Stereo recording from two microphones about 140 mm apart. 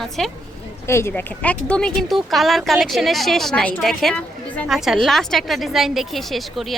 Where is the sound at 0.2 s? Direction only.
5° left (ahead or behind).